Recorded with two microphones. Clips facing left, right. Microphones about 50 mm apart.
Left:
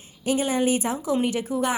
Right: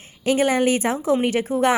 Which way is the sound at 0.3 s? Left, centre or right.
Right.